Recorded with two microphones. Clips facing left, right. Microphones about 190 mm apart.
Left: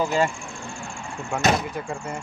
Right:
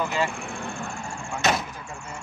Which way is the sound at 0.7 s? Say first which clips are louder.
Right 2 dB; 60° right (ahead or behind).